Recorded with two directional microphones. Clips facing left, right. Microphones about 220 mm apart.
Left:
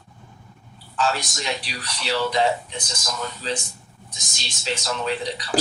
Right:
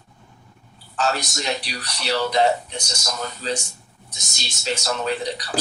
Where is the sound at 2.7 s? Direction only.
70° right (ahead or behind).